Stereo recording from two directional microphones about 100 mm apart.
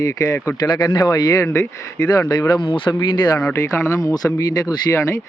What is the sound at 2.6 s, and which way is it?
Speech, 60° left (ahead or behind).